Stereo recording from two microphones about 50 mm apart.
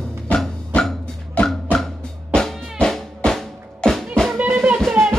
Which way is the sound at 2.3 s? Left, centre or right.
Centre.